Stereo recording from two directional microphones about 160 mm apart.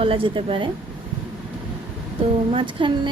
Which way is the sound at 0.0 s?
35° right (ahead or behind).